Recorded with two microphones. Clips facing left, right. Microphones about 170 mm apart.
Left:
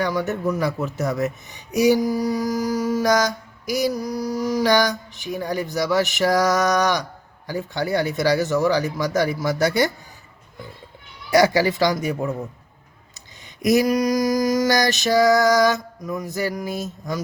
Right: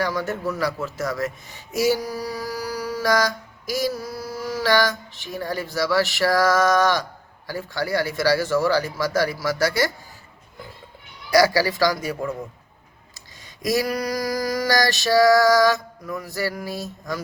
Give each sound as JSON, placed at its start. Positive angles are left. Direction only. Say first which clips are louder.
{"t": 0.0, "sound": "speech", "louder": "left 2 dB", "side_deg": 20}
{"t": 11.3, "sound": "speech", "louder": "left 1 dB", "side_deg": 25}